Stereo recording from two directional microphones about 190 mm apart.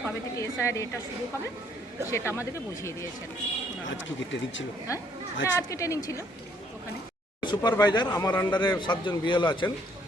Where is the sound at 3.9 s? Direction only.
75° left (ahead or behind).